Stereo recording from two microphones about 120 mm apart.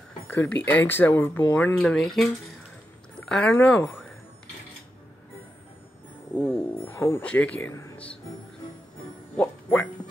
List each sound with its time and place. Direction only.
0.3 s speech: 15° left (ahead or behind)
3.7 s speech: 20° left (ahead or behind)
6.3 s speech: 15° left (ahead or behind)
9.4 s speech: 15° left (ahead or behind)